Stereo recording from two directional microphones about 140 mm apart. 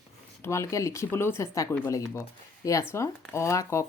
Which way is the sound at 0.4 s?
20° left (ahead or behind).